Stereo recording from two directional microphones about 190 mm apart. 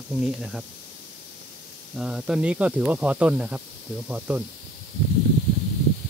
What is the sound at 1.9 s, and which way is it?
Speech, 5° right (ahead or behind).